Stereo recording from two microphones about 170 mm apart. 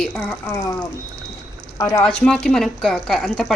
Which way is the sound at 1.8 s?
25° left (ahead or behind).